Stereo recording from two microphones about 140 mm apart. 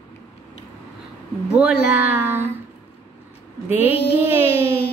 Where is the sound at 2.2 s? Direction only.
15° right (ahead or behind).